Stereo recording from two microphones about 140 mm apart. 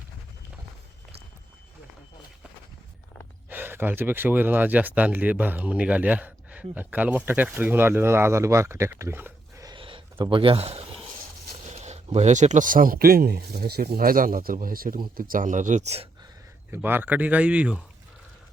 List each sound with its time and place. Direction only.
3.5 s speech: 15° right (ahead or behind)
9.6 s a sound: 35° right (ahead or behind); by 11.9 s 55° right (ahead or behind)
12.0 s speech: 50° right (ahead or behind)
16.7 s speech: 15° right (ahead or behind)